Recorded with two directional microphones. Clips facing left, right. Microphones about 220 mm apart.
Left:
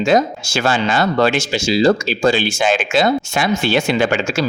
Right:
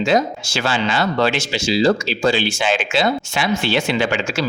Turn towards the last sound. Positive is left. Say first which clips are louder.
# left 3 dB
turn(degrees=45)  # may be behind; listen again after turning